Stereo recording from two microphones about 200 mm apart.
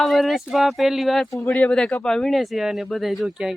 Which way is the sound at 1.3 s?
10° left (ahead or behind).